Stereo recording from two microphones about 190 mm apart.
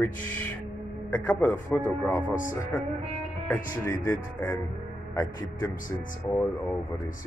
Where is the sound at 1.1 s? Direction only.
5° left (ahead or behind).